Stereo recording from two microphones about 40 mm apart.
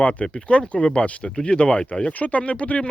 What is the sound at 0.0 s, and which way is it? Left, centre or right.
Speech, left.